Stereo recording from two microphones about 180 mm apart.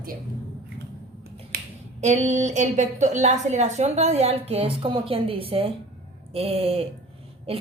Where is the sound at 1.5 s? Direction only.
55° right (ahead or behind).